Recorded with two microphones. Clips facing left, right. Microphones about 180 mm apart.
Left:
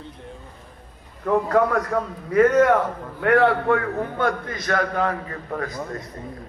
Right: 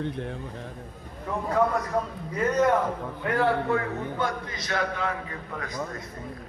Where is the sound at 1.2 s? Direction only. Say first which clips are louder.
Left 6 dB; 65° left (ahead or behind).